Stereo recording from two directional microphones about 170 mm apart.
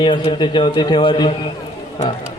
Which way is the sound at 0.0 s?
30° left (ahead or behind).